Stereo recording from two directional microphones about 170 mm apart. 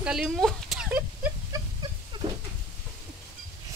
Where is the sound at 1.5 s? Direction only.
20° right (ahead or behind).